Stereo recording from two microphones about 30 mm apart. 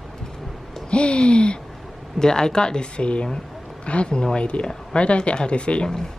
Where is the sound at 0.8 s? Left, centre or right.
Left.